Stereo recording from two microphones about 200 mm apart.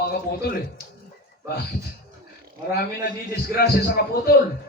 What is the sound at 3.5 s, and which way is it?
Speech, 50° left (ahead or behind).